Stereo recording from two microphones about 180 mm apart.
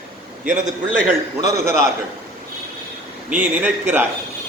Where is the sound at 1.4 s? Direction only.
15° right (ahead or behind).